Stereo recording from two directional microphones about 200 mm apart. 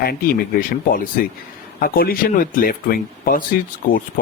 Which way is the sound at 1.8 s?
45° left (ahead or behind).